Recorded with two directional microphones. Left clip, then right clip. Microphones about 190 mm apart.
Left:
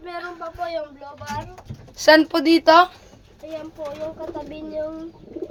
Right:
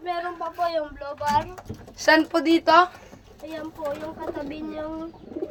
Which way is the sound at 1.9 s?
40° left (ahead or behind).